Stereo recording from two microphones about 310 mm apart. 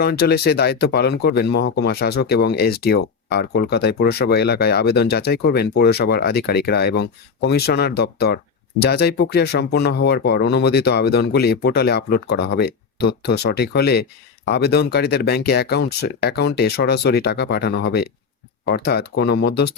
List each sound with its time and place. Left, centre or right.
0.0 s speech: left